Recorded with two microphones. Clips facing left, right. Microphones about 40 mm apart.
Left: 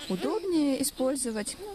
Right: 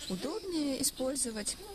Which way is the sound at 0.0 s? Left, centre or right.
Left.